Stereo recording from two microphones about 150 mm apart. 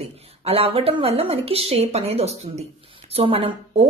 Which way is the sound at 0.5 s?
40° right (ahead or behind).